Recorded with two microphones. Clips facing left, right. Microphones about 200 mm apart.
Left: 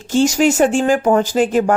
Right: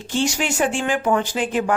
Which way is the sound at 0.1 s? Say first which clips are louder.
Left 9 dB; 40° left (ahead or behind).